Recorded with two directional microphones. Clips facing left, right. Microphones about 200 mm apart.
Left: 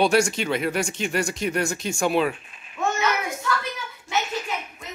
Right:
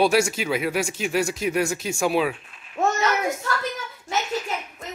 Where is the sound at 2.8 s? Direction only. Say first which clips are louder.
Right 3 dB; 40° right (ahead or behind).